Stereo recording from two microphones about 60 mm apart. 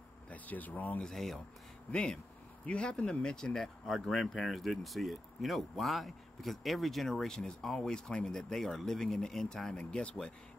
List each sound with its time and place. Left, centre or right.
0.3 s speech: left
1.0 s speech: centre
1.9 s speech: centre